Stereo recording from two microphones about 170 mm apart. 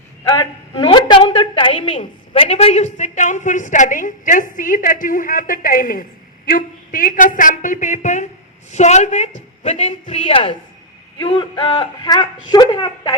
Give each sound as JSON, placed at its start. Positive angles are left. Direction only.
{"t": 0.7, "sound": "a woman's voice", "side_deg": 30}